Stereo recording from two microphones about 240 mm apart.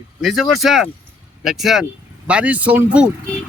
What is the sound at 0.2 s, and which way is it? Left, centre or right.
Speech, centre.